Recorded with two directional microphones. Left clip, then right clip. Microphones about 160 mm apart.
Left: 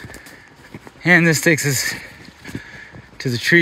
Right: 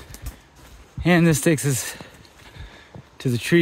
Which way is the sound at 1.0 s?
30° right (ahead or behind).